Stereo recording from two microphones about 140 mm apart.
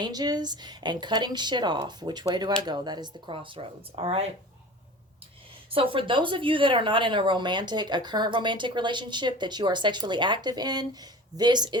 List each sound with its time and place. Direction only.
0.0 s speech: 30° right (ahead or behind); by 4.3 s 45° right (ahead or behind)
5.7 s speech: 40° right (ahead or behind)